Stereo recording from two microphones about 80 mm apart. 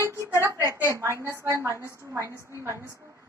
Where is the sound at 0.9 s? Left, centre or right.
Right.